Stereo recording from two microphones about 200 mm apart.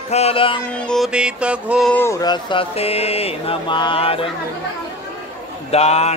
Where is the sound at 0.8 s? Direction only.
Centre (ahead or behind).